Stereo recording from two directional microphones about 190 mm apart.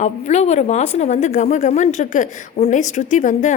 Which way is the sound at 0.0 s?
35° left (ahead or behind).